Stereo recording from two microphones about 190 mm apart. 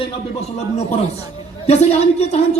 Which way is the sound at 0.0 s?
35° left (ahead or behind).